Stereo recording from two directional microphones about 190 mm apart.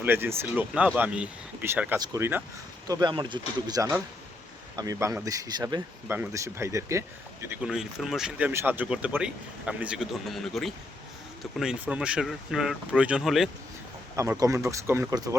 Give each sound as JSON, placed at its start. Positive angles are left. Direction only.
{"t": 0.0, "sound": "speech", "side_deg": -10}
{"t": 14.2, "sound": "speech", "side_deg": -15}